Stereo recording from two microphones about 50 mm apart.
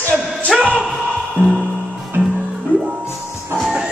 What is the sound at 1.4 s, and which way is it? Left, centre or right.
Music, right.